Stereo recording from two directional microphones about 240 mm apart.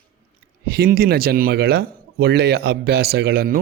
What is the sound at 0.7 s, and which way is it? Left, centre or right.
A man's voice, right.